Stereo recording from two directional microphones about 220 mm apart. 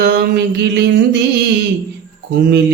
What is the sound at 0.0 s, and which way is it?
Mantra, 45° right (ahead or behind).